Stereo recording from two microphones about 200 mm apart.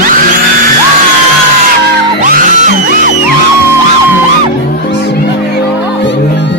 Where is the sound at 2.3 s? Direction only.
45° right (ahead or behind).